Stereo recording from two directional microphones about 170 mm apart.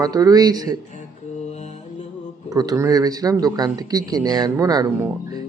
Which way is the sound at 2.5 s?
20° right (ahead or behind).